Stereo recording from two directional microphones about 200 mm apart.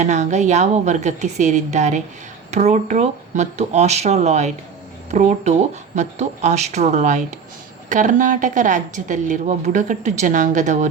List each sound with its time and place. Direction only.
0.0 s a woman's voice: 35° right (ahead or behind)